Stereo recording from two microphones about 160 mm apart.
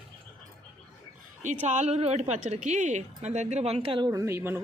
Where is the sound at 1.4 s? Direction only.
45° right (ahead or behind).